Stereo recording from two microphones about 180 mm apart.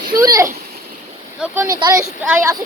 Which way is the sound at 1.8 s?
20° right (ahead or behind).